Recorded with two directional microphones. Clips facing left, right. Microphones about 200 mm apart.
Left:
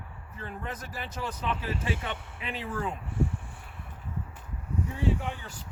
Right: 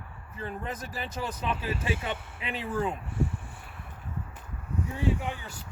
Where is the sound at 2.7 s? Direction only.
20° right (ahead or behind).